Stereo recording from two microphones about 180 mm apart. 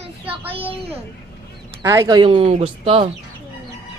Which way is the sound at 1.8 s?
20° right (ahead or behind).